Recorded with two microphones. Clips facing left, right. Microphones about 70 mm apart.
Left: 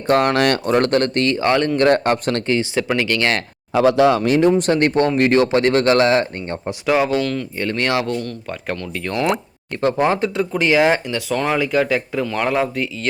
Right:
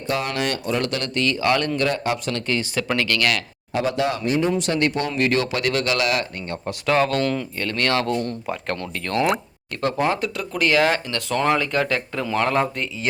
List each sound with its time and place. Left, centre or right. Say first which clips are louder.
0.1 s speech: left 9 dB; left
1.8 s speech: left 7 dB; left
2.5 s speech: left 3 dB; left
3.8 s speech: left 9 dB; left
4.4 s speech: left 7 dB; left
4.7 s speech: left 6 dB; left
6.8 s speech: left 2 dB; centre
7.2 s speech: left 1 dB; centre
7.6 s speech: left 3 dB; centre
9.8 s speech: left 4 dB; left
11.3 s speech: left 1 dB; centre